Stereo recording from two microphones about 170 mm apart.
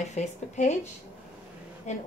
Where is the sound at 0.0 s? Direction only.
45° left (ahead or behind).